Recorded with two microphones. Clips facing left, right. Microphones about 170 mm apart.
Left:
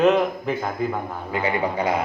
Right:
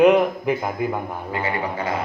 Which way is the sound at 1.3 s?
20° left (ahead or behind).